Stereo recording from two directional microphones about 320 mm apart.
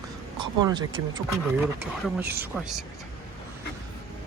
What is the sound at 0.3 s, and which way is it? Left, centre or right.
Speech, centre.